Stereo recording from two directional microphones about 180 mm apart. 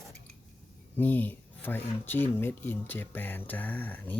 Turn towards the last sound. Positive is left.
turn(degrees=10)  # may be behind; listen again after turning